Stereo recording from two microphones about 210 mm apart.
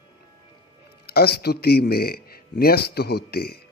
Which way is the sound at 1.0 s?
50° left (ahead or behind).